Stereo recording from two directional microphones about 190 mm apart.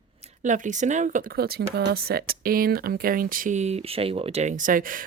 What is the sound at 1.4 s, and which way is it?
Speech, 55° right (ahead or behind).